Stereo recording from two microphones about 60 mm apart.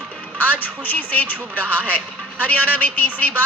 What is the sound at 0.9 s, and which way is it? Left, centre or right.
A woman's voice, left.